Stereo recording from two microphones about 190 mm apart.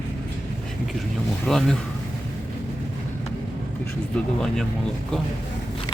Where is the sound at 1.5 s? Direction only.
Centre (ahead or behind).